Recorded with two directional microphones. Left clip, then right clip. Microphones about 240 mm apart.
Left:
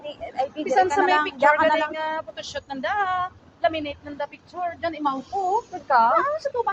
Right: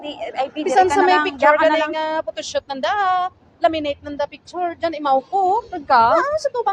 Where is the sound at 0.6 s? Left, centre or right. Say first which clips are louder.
Right 5 dB; right.